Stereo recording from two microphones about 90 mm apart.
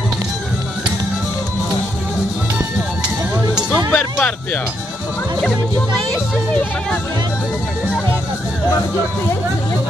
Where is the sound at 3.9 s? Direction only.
15° left (ahead or behind).